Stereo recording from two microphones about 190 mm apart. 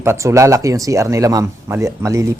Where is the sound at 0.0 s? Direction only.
15° right (ahead or behind).